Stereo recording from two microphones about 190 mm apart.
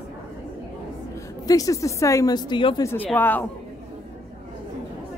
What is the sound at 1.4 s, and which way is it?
A woman's voice, 20° left (ahead or behind).